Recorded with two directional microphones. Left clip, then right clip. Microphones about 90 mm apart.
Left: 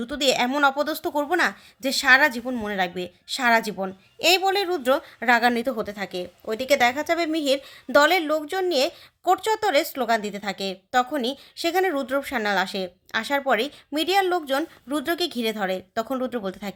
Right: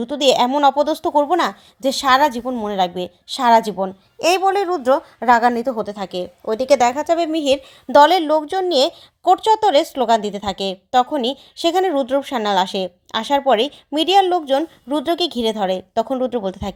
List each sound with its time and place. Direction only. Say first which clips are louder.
0.0 s a woman's voice: right 7 dB; 40° right (ahead or behind)
2.5 s a woman's voice: right 6 dB; 30° right (ahead or behind)
2.7 s speech: right 8 dB; 45° right (ahead or behind)
4.4 s a woman's voice: right 5 dB; 20° right (ahead or behind); by 16.7 s 45° right (ahead or behind)